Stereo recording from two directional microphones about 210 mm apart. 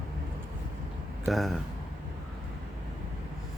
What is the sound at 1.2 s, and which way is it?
Speech, centre (ahead or behind).